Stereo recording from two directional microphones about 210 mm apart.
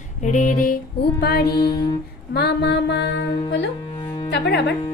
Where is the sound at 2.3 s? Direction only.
50° left (ahead or behind).